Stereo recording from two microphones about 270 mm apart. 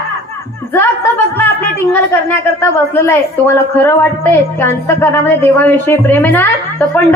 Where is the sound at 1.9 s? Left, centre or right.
Centre.